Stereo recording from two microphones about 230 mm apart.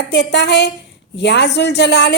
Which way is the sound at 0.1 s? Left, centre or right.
Left.